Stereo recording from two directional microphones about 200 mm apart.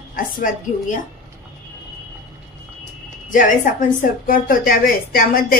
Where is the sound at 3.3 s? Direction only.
40° left (ahead or behind).